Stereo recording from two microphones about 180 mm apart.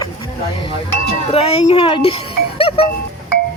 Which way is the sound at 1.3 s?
35° left (ahead or behind).